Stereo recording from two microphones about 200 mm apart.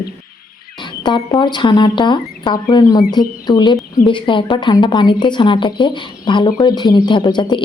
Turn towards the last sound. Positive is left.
turn(degrees=20)  # may be behind; listen again after turning